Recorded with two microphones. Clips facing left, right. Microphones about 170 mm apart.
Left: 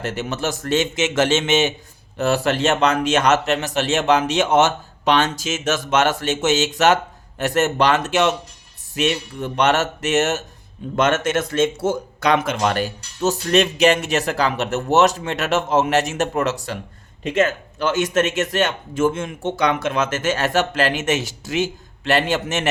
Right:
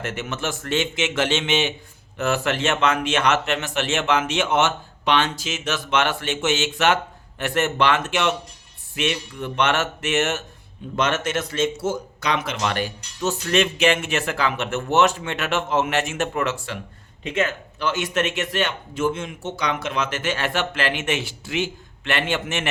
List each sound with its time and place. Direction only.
0.0 s speech: 35° left (ahead or behind)